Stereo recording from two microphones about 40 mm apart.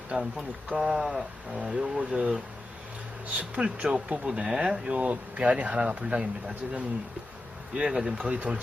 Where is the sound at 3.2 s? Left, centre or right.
Right.